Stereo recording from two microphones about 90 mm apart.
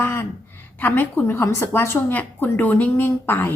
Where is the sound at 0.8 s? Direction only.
20° left (ahead or behind).